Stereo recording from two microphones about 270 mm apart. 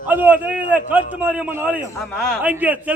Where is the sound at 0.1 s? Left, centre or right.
Centre.